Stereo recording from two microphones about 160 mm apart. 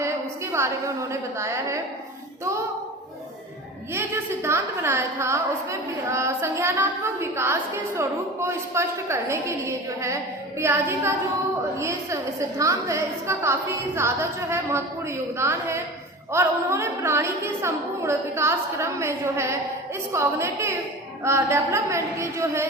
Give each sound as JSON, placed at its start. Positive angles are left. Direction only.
{"t": 0.5, "sound": "a woman's voice", "side_deg": -15}
{"t": 4.4, "sound": "a woman's voice", "side_deg": -15}